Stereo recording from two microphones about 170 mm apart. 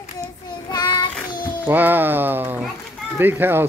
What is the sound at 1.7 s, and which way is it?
Speech, 10° right (ahead or behind).